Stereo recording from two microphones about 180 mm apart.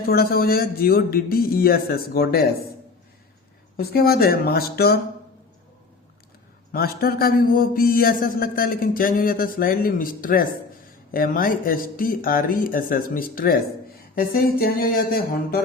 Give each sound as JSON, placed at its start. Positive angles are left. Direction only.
{"t": 0.1, "sound": "a man's voice", "side_deg": 55}
{"t": 3.8, "sound": "a man's voice", "side_deg": 60}
{"t": 6.7, "sound": "a man's voice", "side_deg": 55}